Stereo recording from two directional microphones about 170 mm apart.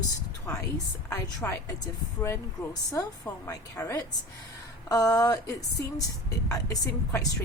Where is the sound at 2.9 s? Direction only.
20° left (ahead or behind).